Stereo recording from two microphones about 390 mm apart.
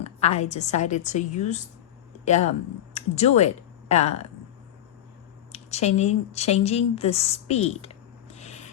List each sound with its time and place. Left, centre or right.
0.0 s a woman's voice: centre
5.5 s speech: centre